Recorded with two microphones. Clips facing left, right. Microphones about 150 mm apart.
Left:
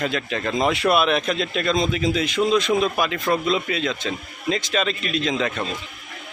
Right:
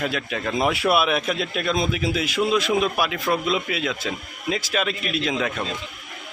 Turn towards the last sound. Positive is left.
turn(degrees=-5)  # may be behind; listen again after turning